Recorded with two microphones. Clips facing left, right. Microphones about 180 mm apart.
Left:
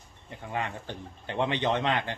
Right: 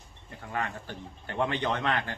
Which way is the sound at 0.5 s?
20° left (ahead or behind).